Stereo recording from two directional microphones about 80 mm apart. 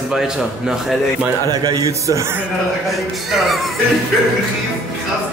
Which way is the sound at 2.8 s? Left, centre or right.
Centre.